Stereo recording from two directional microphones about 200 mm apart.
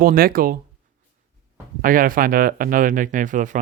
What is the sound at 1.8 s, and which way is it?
Speech, 45° right (ahead or behind).